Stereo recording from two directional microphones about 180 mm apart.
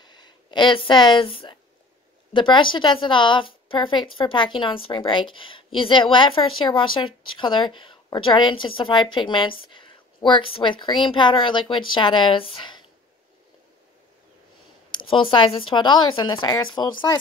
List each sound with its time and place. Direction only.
0.0 s a woman's voice: 25° left (ahead or behind)
14.9 s a woman's voice: 25° left (ahead or behind)